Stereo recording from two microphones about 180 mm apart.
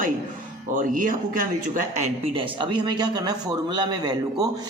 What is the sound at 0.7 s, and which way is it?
Speech, 50° right (ahead or behind).